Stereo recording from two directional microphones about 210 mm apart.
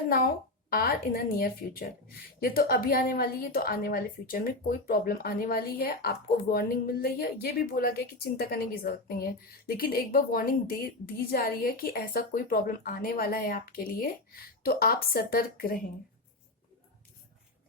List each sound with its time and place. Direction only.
0.7 s a woman's voice: 45° left (ahead or behind)